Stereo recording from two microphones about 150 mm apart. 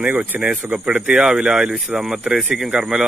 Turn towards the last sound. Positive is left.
turn(degrees=-5)  # may be behind; listen again after turning